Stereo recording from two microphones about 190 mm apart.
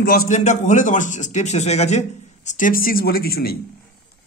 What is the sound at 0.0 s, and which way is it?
Speech, 45° left (ahead or behind).